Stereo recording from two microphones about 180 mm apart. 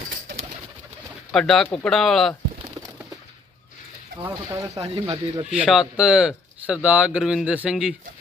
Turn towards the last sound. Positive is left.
turn(degrees=-5)  # may be behind; listen again after turning